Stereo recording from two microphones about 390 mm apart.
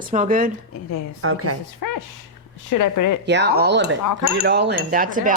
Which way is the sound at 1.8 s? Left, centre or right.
Left.